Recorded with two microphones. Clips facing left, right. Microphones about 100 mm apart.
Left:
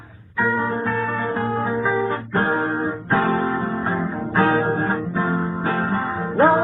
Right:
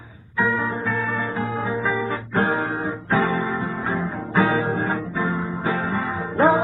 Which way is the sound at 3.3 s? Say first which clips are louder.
Left 3 dB; 50° left (ahead or behind).